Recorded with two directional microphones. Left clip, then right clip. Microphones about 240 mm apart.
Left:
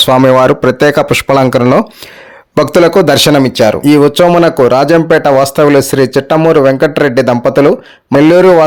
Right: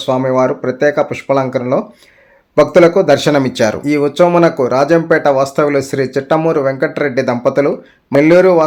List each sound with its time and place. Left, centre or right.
0.0 s speech: left
3.4 s speech: centre
3.8 s speech: left